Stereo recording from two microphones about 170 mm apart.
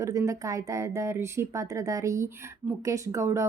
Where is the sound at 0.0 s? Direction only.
15° right (ahead or behind).